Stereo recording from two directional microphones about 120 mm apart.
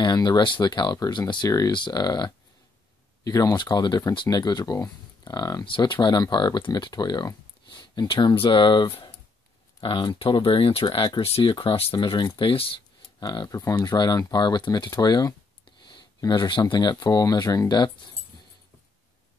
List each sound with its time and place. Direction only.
0.0 s speech: 35° left (ahead or behind)
13.2 s speech: 35° left (ahead or behind)